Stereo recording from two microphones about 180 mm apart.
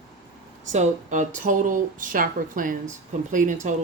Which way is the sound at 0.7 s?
45° right (ahead or behind).